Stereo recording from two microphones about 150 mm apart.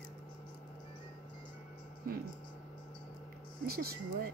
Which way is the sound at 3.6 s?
90° right.